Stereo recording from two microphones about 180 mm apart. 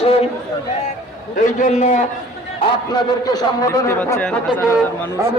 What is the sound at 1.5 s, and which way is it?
Speech, 45° left (ahead or behind).